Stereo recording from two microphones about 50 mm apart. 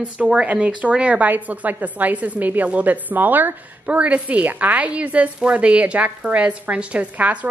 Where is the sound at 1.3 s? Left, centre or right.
Right.